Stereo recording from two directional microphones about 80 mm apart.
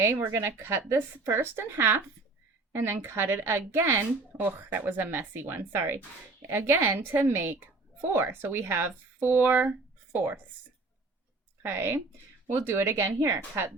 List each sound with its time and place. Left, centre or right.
0.3 s speech: right
11.6 s speech: right